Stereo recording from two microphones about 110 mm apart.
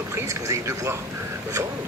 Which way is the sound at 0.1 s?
30° right (ahead or behind).